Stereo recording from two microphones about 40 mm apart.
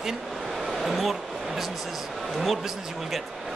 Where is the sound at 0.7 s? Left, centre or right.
Centre.